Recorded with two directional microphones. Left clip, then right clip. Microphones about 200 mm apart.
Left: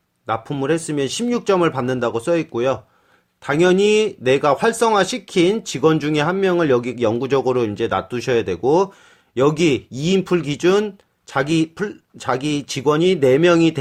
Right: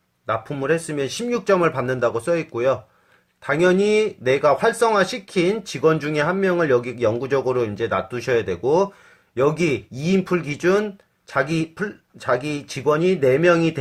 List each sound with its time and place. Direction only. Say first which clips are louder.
0.3 s speech: left 1 dB; 35° left (ahead or behind)